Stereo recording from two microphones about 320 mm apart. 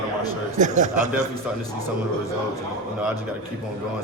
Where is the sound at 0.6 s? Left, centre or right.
Right.